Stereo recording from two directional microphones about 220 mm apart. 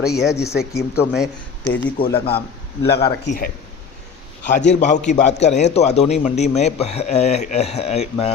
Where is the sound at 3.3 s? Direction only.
40° left (ahead or behind).